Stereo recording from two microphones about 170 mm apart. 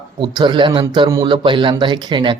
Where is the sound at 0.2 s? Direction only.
30° right (ahead or behind).